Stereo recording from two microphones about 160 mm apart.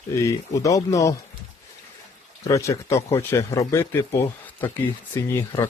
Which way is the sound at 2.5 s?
20° left (ahead or behind).